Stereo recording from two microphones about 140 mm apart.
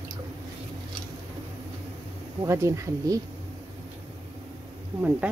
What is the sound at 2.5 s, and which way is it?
Speech, 20° right (ahead or behind).